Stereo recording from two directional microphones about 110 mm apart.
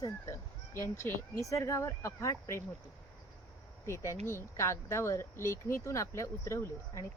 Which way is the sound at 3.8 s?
25° left (ahead or behind).